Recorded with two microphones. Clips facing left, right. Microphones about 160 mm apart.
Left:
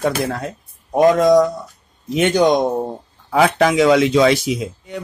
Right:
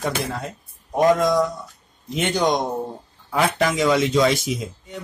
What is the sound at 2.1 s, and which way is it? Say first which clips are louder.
A man's voice: left 6 dB; 60° left (ahead or behind).